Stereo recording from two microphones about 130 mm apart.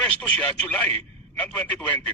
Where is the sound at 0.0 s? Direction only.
10° left (ahead or behind).